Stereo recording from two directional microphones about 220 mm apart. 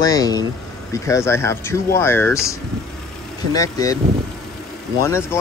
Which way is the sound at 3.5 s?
15° left (ahead or behind).